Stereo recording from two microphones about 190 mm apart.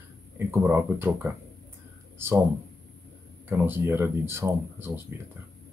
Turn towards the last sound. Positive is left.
turn(degrees=-15)  # may be behind; listen again after turning